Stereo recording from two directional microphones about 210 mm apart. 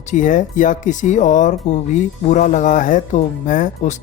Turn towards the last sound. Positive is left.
turn(degrees=35)  # may be behind; listen again after turning